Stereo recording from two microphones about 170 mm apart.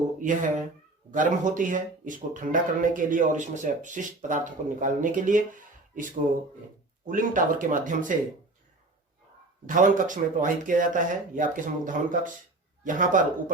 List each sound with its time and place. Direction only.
0.2 s speech: 50° right (ahead or behind)
7.1 s speech: 50° right (ahead or behind)
9.6 s a man's voice: 50° right (ahead or behind)